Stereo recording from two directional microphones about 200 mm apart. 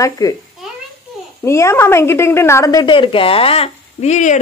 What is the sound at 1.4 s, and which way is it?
A woman's voice, 15° left (ahead or behind).